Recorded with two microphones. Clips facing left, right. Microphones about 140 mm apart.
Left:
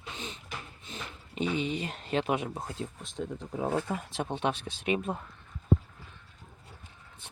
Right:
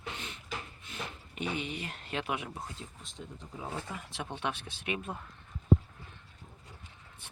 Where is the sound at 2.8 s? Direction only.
65° left (ahead or behind).